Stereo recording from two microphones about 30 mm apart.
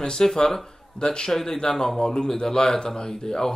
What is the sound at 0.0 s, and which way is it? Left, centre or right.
Speech, centre.